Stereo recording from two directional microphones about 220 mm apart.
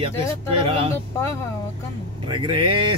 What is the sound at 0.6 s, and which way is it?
Speech, 25° right (ahead or behind).